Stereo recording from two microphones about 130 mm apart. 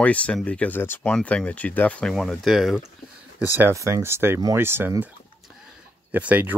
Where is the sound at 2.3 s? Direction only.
Centre (ahead or behind).